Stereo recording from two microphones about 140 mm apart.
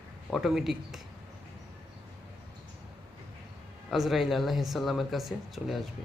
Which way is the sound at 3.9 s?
Centre (ahead or behind).